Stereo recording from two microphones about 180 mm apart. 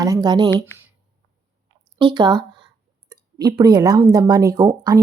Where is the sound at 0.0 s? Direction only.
20° right (ahead or behind).